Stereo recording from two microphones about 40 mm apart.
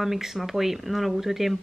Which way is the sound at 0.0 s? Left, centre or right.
Centre.